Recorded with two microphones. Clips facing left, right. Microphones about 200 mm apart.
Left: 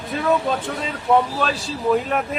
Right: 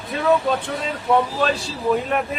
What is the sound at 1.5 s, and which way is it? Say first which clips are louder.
Speech: even; centre (ahead or behind).